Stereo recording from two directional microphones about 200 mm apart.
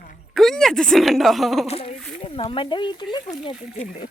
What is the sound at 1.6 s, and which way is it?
Speech, 30° left (ahead or behind).